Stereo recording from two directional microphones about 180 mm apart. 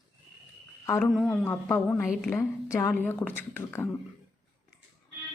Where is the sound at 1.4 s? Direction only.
10° left (ahead or behind).